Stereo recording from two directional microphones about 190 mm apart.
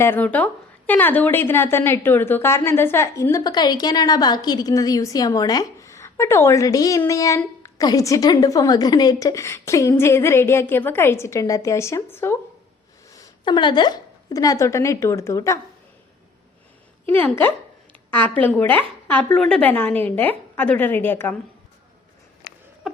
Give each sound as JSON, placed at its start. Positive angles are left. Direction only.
{"t": 0.0, "sound": "a woman's voice", "side_deg": 10}
{"t": 17.1, "sound": "speech", "side_deg": 10}